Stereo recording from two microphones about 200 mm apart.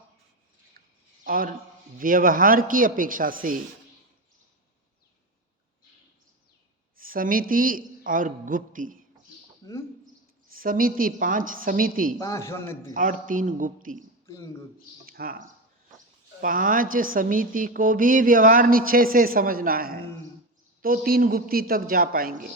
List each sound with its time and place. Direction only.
1.2 s a man's voice: 45° right (ahead or behind)
6.9 s a man's voice: 45° right (ahead or behind)
10.5 s a woman's voice: 45° right (ahead or behind)
12.2 s a man's voice: 15° left (ahead or behind)
12.9 s a man's voice: 40° right (ahead or behind)
15.0 s a woman's voice: 45° right (ahead or behind)